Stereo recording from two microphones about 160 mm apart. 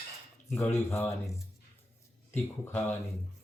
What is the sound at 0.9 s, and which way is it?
Speech, 15° left (ahead or behind).